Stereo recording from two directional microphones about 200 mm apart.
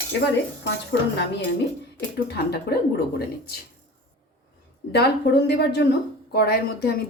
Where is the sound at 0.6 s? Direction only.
60° left (ahead or behind).